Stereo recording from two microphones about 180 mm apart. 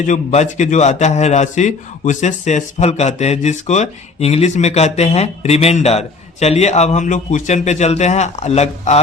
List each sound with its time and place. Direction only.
0.1 s a man's voice: 40° left (ahead or behind)